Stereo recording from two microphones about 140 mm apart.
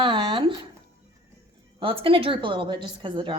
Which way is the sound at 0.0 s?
35° right (ahead or behind).